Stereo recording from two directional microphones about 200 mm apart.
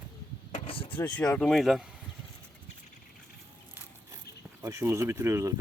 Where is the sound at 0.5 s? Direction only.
30° left (ahead or behind).